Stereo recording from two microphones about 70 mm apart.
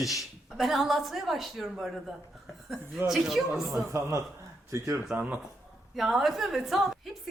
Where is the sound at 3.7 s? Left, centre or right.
Right.